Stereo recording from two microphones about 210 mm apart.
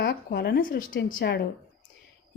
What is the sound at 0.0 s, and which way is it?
A woman's voice, 50° left (ahead or behind).